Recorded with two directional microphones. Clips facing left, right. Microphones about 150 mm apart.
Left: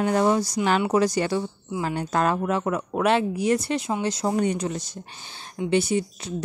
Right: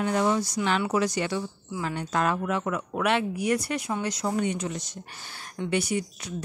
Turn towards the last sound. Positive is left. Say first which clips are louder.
# left 4 dB
turn(degrees=25)  # may be behind; listen again after turning